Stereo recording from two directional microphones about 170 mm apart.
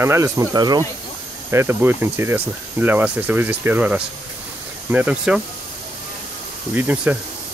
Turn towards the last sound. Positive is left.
turn(degrees=-10)  # may be behind; listen again after turning